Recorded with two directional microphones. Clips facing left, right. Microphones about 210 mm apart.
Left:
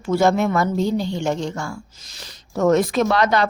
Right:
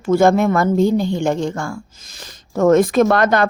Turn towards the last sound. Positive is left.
turn(degrees=-50)  # may be behind; listen again after turning